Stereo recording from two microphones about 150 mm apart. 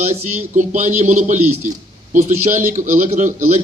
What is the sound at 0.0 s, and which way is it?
A man's voice, 55° right (ahead or behind).